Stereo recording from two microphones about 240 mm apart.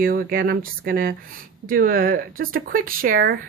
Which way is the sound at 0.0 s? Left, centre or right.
Right.